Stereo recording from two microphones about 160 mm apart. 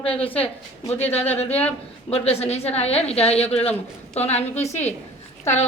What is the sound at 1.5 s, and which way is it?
Speech, 10° left (ahead or behind).